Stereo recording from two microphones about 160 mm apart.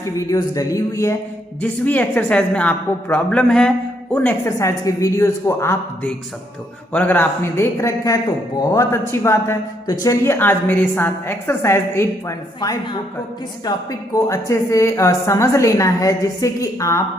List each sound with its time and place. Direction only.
0.3 s a woman's voice: 20° left (ahead or behind)
12.5 s a woman's voice: 25° left (ahead or behind)